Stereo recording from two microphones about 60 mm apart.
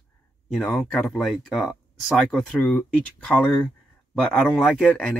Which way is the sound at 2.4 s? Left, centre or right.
Centre.